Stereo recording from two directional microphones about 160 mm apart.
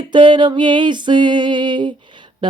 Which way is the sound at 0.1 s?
30° right (ahead or behind).